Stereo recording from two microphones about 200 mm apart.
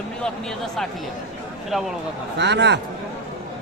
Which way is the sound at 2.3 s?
60° right (ahead or behind).